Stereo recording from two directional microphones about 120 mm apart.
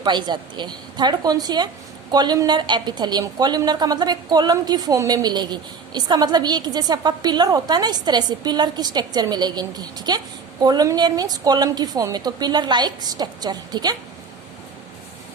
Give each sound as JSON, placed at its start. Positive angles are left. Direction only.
{"t": 0.0, "sound": "a woman's voice", "side_deg": -40}